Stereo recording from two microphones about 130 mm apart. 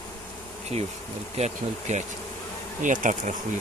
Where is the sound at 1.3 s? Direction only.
60° right (ahead or behind).